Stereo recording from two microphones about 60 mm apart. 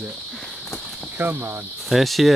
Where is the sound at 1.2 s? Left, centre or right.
Right.